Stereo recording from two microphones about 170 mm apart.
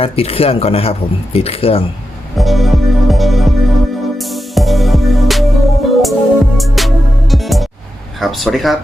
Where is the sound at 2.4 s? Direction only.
Centre (ahead or behind).